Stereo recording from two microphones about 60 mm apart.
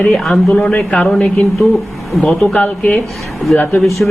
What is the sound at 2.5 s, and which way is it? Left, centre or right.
Speech, left.